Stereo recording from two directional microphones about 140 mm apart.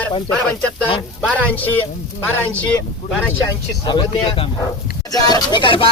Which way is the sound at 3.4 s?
30° left (ahead or behind).